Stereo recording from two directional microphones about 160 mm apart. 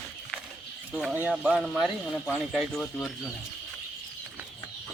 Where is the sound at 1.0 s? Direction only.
5° right (ahead or behind).